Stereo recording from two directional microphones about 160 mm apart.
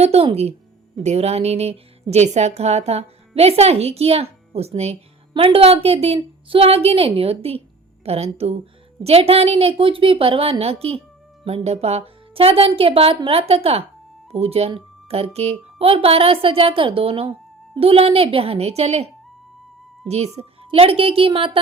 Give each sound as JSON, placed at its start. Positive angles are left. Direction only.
{"t": 0.0, "sound": "a woman's voice", "side_deg": -40}